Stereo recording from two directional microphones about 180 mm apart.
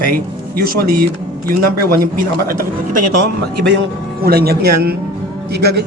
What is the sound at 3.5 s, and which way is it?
Speech, 70° right (ahead or behind).